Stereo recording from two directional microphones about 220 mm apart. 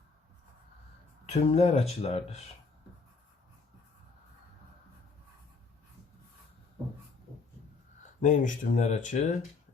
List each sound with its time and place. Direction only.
1.3 s speech: 30° left (ahead or behind)
8.2 s speech: 35° left (ahead or behind)